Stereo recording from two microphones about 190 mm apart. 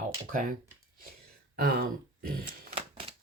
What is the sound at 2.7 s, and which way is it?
Typewriter, 30° right (ahead or behind).